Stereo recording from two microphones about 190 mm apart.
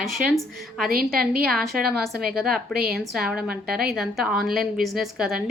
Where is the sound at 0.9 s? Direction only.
50° right (ahead or behind).